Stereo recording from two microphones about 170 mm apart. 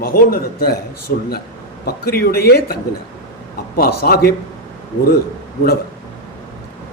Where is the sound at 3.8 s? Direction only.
65° left (ahead or behind).